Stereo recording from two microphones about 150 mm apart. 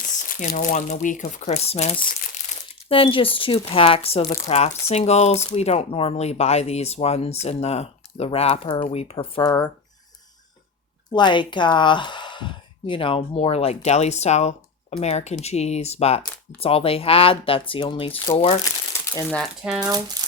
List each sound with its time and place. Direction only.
0.0 s speech: 65° left (ahead or behind); by 9.6 s 25° left (ahead or behind)
11.1 s speech: 30° left (ahead or behind)
19.0 s crumpling: 20° left (ahead or behind)
19.3 s speech: centre (ahead or behind)
20.2 s a sound: 25° right (ahead or behind)